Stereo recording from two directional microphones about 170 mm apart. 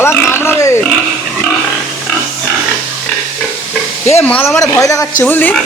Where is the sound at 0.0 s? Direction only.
15° left (ahead or behind).